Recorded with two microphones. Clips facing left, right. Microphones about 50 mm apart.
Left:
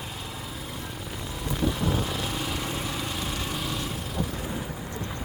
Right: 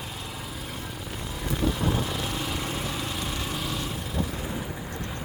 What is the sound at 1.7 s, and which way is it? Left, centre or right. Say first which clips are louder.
Vehicle: even; centre.